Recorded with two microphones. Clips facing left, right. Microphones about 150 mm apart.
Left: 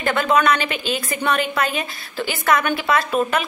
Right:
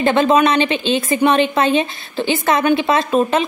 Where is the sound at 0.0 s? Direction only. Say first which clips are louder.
Right 5 dB; 25° right (ahead or behind).